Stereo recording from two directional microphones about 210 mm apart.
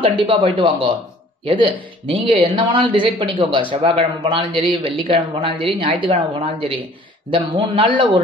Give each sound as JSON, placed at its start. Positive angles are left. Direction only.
{"t": 0.0, "sound": "a man's voice", "side_deg": -25}